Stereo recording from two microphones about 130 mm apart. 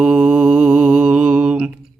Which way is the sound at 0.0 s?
5° right (ahead or behind).